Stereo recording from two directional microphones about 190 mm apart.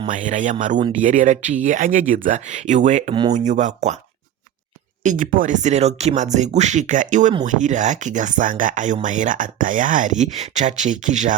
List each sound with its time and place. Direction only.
0.1 s speech: 40° right (ahead or behind)
5.0 s speech: 45° right (ahead or behind)